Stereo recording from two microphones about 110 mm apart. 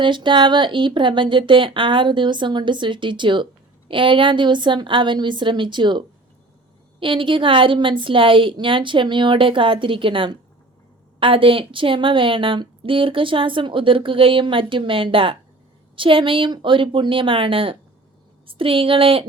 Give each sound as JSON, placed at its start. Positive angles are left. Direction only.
{"t": 0.0, "sound": "a woman's voice", "side_deg": -45}